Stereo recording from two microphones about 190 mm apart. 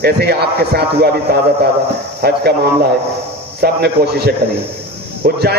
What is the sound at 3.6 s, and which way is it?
Speech, 55° right (ahead or behind).